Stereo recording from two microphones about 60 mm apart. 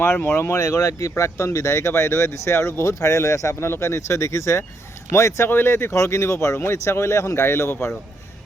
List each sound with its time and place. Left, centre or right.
0.0 s speech: left
3.7 s speech: left
5.5 s speech: left